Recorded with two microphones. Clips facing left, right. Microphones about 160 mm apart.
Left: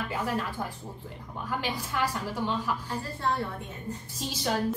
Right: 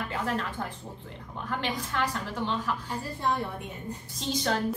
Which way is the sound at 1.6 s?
10° left (ahead or behind).